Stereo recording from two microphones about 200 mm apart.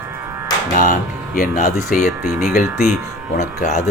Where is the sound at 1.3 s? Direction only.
40° left (ahead or behind).